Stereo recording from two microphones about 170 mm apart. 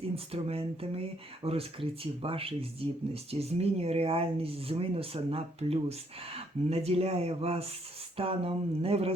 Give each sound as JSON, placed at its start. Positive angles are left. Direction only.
{"t": 0.4, "sound": "speech", "side_deg": -35}